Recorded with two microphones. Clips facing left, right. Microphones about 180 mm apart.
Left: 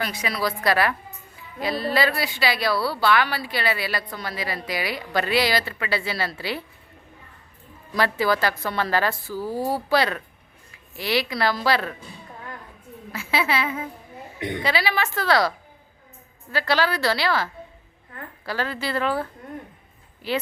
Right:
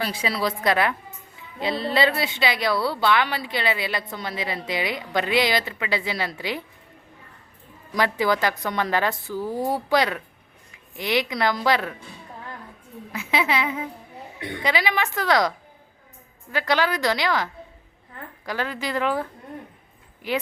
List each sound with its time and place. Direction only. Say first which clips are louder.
0.0 s a woman's voice: right 1 dB; 30° right (ahead or behind)
7.9 s a woman's voice: even; 15° right (ahead or behind)
13.1 s a woman's voice: even; 20° right (ahead or behind)
14.3 s a woman's voice: left 5 dB; 20° left (ahead or behind)
14.6 s a woman's voice: right 1 dB; 15° right (ahead or behind)
20.2 s a woman's voice: even; 15° right (ahead or behind)